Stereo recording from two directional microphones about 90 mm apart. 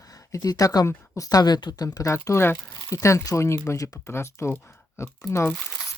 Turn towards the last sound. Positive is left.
turn(degrees=30)  # may be behind; listen again after turning